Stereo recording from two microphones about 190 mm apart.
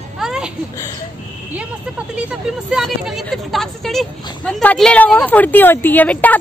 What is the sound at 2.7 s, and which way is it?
A woman's voice, centre (ahead or behind).